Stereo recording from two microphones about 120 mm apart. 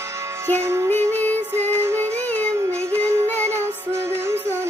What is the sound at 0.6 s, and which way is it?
Music, 20° right (ahead or behind).